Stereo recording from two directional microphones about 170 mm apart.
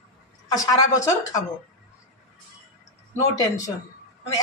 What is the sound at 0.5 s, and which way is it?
Speech, 20° left (ahead or behind).